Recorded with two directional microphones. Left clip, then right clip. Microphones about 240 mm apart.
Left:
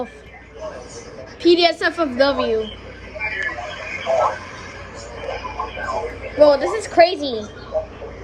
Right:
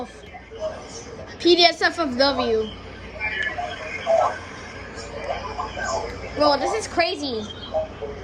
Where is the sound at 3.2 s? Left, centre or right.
Centre.